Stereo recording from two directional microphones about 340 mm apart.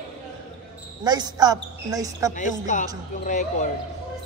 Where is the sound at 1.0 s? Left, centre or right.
Centre.